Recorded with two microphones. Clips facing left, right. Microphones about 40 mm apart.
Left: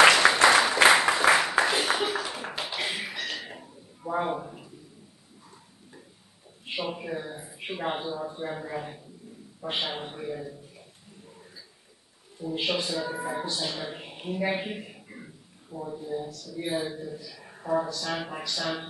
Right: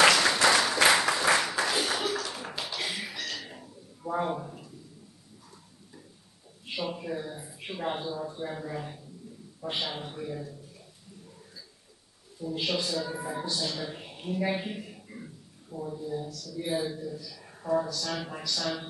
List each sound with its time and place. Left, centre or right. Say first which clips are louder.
0.0 s applause: left 4 dB; centre
1.6 s a sound: left 4 dB; left
6.6 s a man's voice: left 1 dB; left
12.4 s a man's voice: left 2 dB; left